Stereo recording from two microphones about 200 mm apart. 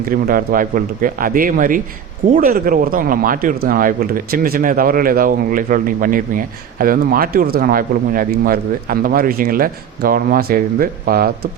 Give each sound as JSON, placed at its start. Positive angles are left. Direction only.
{"t": 0.1, "sound": "speech", "side_deg": -45}